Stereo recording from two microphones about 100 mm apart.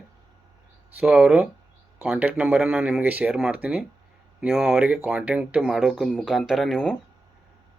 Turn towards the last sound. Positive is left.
turn(degrees=0)  # may be behind; listen again after turning